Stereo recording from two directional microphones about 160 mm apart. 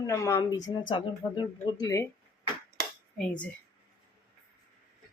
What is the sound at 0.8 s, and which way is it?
Speech, 30° left (ahead or behind).